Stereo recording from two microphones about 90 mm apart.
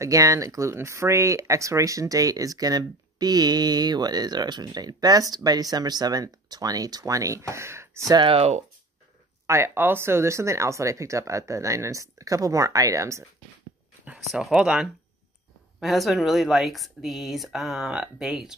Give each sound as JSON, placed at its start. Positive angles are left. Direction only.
{"t": 0.0, "sound": "speech", "side_deg": -35}
{"t": 9.5, "sound": "speech", "side_deg": -25}
{"t": 14.1, "sound": "speech", "side_deg": -5}